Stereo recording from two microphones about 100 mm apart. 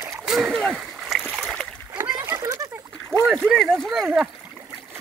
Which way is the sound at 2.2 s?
25° right (ahead or behind).